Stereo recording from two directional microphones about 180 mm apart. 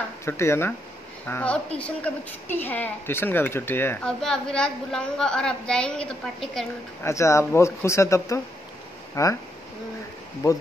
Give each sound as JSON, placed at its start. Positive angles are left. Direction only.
{"t": 0.2, "sound": "speech", "side_deg": 15}
{"t": 7.0, "sound": "speech", "side_deg": 15}